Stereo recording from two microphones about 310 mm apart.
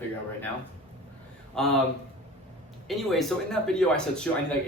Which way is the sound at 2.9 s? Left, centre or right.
Centre.